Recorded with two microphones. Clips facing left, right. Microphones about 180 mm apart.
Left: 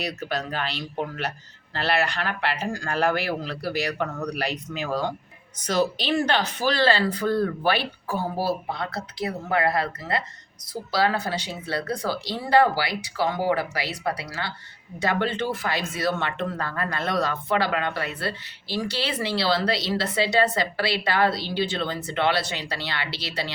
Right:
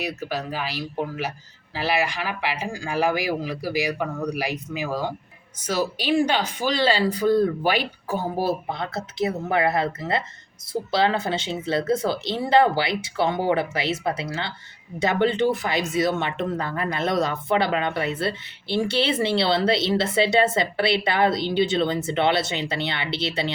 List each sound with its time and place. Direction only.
0.0 s speech: 5° right (ahead or behind); by 23.5 s 25° right (ahead or behind)